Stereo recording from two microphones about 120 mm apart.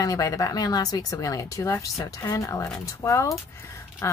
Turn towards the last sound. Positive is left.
turn(degrees=25)  # may be behind; listen again after turning